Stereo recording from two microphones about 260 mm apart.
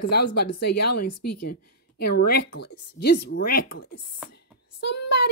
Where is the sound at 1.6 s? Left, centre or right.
Left.